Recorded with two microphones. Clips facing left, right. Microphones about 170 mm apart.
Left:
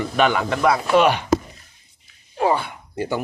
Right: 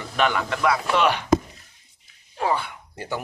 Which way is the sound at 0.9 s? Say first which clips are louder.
Left 7 dB; 15° left (ahead or behind).